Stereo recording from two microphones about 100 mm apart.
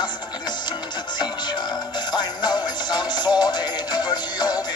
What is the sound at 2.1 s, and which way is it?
Music, 45° left (ahead or behind).